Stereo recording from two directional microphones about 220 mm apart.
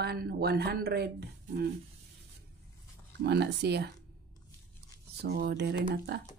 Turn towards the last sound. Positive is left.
turn(degrees=-50)  # may be behind; listen again after turning